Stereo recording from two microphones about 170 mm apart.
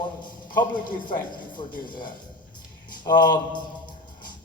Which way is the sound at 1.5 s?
25° left (ahead or behind).